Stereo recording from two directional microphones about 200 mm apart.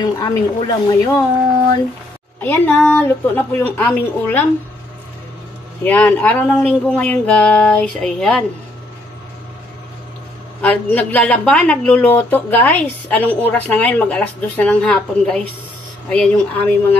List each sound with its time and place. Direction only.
0.0 s speech: 20° left (ahead or behind)
2.4 s a woman's voice: 10° left (ahead or behind)
5.9 s speech: 10° left (ahead or behind)
10.6 s a woman's voice: 10° left (ahead or behind)